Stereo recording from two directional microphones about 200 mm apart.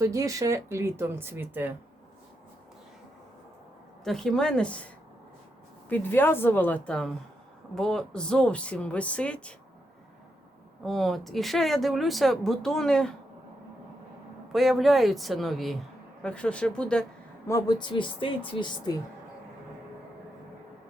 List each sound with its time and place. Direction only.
0.0 s speech: 15° right (ahead or behind)
4.0 s speech: centre (ahead or behind)
5.9 s a woman's voice: 10° left (ahead or behind)
10.8 s speech: centre (ahead or behind)
14.5 s speech: centre (ahead or behind)
17.5 s a woman's voice: 20° left (ahead or behind)